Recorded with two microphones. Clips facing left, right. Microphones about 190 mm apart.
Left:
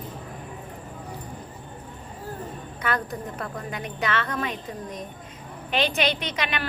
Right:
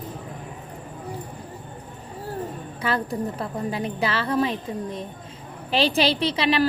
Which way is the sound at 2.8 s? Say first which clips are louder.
Right 3 dB; 30° right (ahead or behind).